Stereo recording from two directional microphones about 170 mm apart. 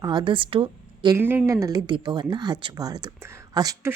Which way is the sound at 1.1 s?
10° right (ahead or behind).